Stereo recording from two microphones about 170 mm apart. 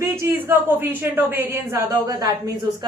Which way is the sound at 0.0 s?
15° right (ahead or behind).